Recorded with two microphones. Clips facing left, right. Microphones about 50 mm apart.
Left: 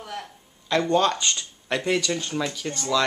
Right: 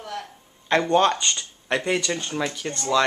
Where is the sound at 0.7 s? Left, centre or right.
Right.